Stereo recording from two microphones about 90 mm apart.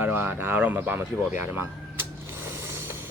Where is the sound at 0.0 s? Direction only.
20° right (ahead or behind).